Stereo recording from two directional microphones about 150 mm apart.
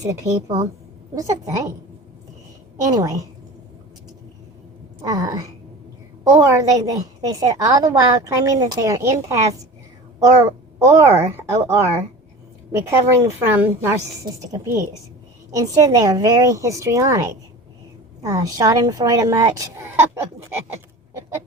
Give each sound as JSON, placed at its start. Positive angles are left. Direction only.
{"t": 0.0, "sound": "a woman's voice", "side_deg": -20}
{"t": 2.9, "sound": "a woman's voice", "side_deg": -25}
{"t": 5.0, "sound": "a woman's voice", "side_deg": -25}
{"t": 21.1, "sound": "a sound", "side_deg": -15}